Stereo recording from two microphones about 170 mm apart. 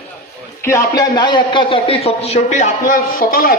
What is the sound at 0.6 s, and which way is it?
A man's voice, 20° left (ahead or behind).